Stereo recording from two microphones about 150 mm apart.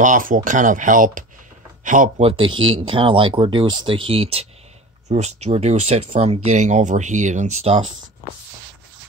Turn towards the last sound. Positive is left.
turn(degrees=-45)  # may be behind; listen again after turning